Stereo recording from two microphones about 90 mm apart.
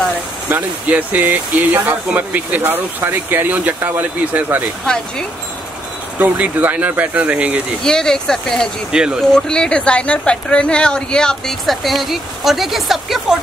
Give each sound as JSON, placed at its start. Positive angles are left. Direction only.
{"t": 0.5, "sound": "speech", "side_deg": -20}
{"t": 4.8, "sound": "speech", "side_deg": 10}
{"t": 6.1, "sound": "speech", "side_deg": -20}
{"t": 7.8, "sound": "speech", "side_deg": 5}
{"t": 8.9, "sound": "speech", "side_deg": -10}
{"t": 9.3, "sound": "speech", "side_deg": 10}